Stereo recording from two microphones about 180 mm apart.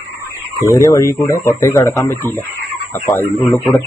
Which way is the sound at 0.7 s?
15° left (ahead or behind).